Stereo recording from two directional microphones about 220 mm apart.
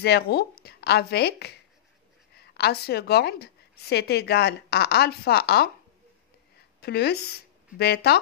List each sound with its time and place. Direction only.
0.0 s a woman's voice: 50° left (ahead or behind)
6.8 s a woman's voice: 45° left (ahead or behind)